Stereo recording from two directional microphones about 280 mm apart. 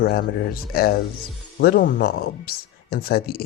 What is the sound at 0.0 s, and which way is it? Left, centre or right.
Speech, left.